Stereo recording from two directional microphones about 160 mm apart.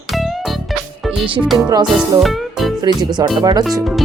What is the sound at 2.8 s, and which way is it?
Speech, 25° right (ahead or behind).